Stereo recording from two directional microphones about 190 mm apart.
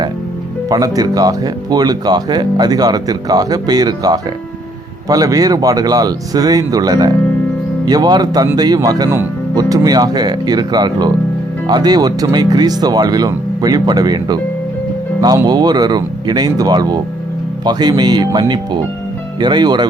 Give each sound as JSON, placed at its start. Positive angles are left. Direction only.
{"t": 0.7, "sound": "speech", "side_deg": -20}